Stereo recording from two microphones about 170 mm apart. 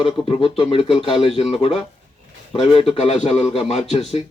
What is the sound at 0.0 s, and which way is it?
A man's voice, 30° left (ahead or behind).